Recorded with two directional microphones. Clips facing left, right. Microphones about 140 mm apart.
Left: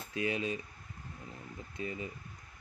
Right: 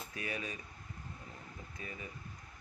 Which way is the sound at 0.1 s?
25° left (ahead or behind).